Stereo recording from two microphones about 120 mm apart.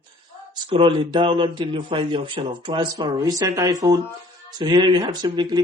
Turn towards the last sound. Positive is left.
turn(degrees=-40)  # may be behind; listen again after turning